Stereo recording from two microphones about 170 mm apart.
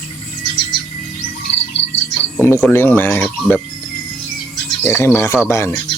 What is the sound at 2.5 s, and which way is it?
Speech, 10° left (ahead or behind).